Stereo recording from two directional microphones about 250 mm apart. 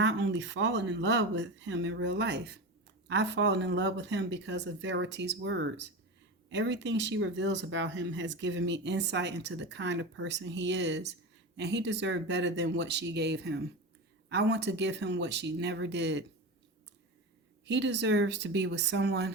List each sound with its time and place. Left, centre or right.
0.0 s speech: right
17.7 s speech: right